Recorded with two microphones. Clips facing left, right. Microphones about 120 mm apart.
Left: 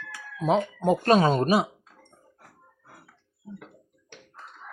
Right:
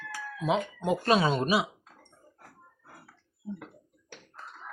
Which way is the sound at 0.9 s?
40° left (ahead or behind).